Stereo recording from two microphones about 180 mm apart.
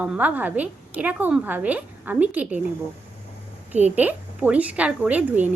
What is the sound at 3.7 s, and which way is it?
A woman's voice, 10° right (ahead or behind).